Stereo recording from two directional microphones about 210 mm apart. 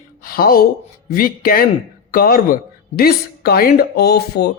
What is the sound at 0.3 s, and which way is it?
Speech, 45° left (ahead or behind).